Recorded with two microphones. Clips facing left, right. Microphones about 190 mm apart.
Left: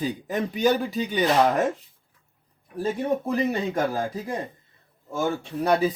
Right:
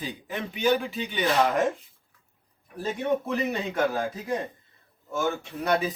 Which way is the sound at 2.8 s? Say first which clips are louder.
Left 2 dB; 35° left (ahead or behind).